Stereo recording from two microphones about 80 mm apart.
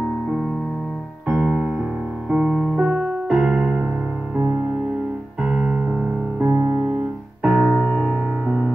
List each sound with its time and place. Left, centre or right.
1.3 s keyboard: centre
5.4 s keyboard: centre
6.4 s music: centre
7.4 s keyboard: centre
7.7 s music: centre